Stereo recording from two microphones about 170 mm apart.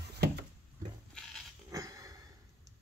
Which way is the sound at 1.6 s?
20° right (ahead or behind).